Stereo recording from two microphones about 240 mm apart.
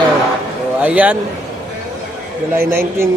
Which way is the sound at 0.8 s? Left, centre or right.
Centre.